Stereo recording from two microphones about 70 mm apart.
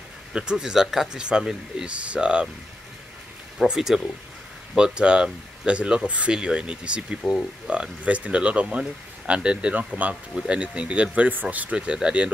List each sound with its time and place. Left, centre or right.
0.3 s speech: centre
3.6 s speech: centre
10.3 s speech: centre